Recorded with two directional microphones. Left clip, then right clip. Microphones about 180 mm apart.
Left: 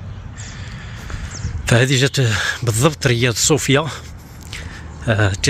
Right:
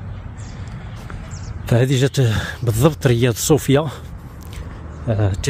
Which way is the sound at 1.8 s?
15° right (ahead or behind).